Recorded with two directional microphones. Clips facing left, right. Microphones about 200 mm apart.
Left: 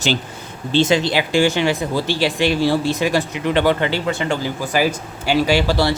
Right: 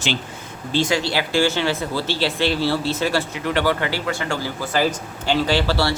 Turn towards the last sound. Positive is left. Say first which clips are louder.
# left 3 dB
turn(degrees=15)  # may be behind; listen again after turning